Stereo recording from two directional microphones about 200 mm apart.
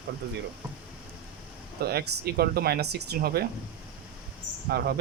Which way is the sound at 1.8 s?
50° right (ahead or behind).